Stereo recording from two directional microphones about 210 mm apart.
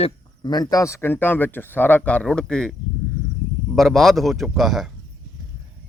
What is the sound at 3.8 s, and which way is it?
A man's voice, centre (ahead or behind).